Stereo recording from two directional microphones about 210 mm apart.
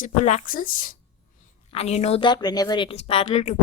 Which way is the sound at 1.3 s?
30° left (ahead or behind).